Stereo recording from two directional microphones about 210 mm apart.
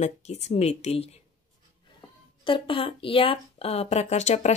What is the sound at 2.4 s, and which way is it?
Speech, 25° left (ahead or behind).